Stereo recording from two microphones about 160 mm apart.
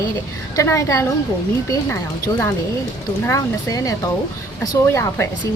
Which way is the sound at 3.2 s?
20° left (ahead or behind).